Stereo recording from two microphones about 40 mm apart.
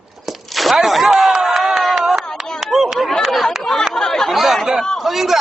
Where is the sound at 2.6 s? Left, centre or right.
Centre.